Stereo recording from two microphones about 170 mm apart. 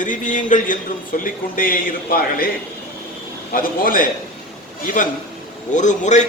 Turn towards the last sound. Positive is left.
turn(degrees=45)  # may be behind; listen again after turning